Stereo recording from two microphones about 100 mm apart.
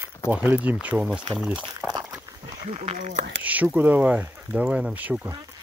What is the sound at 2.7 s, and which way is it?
Speech, 90° right.